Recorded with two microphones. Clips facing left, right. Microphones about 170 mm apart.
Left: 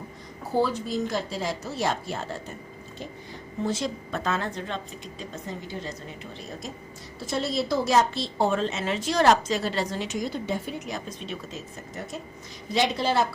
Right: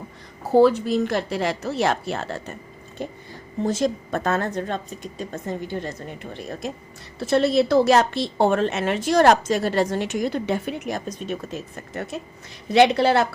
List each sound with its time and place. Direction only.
0.6 s a woman's voice: 65° right (ahead or behind)
3.0 s a woman's voice: 60° right (ahead or behind)
3.7 s a woman's voice: 50° right (ahead or behind)
12.7 s a woman's voice: 65° right (ahead or behind)